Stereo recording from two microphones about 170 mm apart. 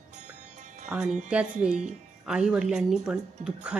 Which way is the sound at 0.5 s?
45° right (ahead or behind).